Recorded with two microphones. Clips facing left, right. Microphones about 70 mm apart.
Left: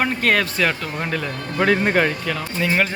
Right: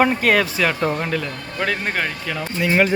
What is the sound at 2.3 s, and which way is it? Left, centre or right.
Speech, centre.